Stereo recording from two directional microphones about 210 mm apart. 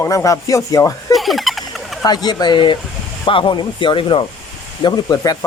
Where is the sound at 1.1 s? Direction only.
Centre (ahead or behind).